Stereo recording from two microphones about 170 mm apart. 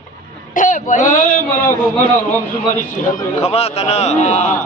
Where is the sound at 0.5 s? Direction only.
50° left (ahead or behind).